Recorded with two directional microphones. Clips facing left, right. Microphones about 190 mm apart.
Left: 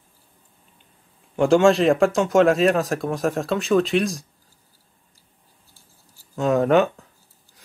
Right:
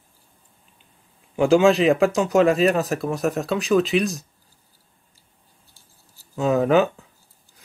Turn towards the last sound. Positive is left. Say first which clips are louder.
# even
turn(degrees=0)  # may be behind; listen again after turning